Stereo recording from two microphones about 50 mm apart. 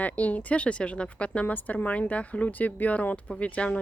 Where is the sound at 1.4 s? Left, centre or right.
Left.